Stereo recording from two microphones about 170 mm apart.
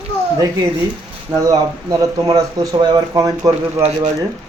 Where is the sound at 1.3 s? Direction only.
20° right (ahead or behind).